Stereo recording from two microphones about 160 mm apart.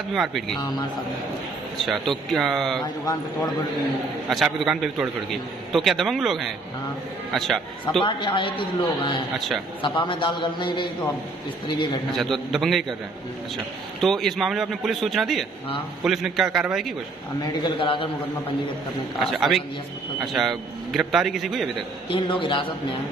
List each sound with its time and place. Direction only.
0.1 s a man's voice: centre (ahead or behind)
0.6 s speech: 25° left (ahead or behind)
1.9 s a man's voice: centre (ahead or behind)
4.3 s a man's voice: centre (ahead or behind)
8.0 s a man's voice: 30° left (ahead or behind)
12.1 s a man's voice: centre (ahead or behind)
14.0 s a man's voice: centre (ahead or behind)
17.4 s a man's voice: 35° left (ahead or behind)
19.1 s a man's voice: centre (ahead or behind)
22.1 s a man's voice: 30° left (ahead or behind)